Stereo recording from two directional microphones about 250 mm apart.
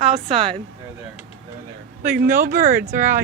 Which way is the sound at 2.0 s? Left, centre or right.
Right.